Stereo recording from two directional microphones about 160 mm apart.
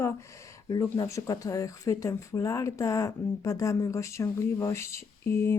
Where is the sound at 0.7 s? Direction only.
20° left (ahead or behind).